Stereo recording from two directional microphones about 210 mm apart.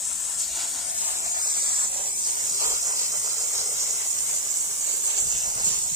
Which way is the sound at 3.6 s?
35° right (ahead or behind).